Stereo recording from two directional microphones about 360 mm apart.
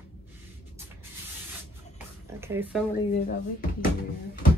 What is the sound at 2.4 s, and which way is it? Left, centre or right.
Speech, centre.